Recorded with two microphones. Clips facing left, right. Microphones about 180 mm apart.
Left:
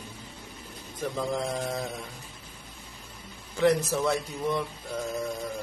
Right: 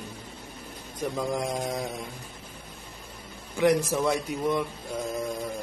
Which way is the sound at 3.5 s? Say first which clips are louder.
Right 1 dB; 10° right (ahead or behind).